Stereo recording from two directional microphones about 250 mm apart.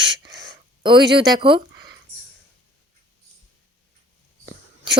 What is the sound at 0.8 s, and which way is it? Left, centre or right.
Speech, centre.